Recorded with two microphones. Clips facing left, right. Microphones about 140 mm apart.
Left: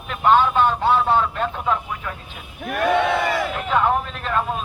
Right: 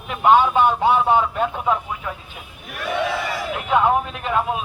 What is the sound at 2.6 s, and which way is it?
Speech, 55° left (ahead or behind).